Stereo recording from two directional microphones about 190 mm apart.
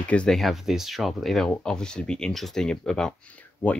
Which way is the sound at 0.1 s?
5° left (ahead or behind).